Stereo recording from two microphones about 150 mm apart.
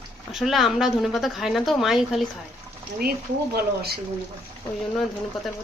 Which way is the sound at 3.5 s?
90° right.